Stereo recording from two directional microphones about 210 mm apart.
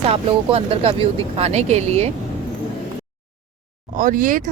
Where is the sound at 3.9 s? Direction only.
40° right (ahead or behind).